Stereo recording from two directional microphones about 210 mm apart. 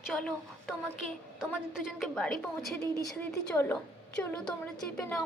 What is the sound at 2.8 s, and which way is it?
A woman's voice, 15° left (ahead or behind).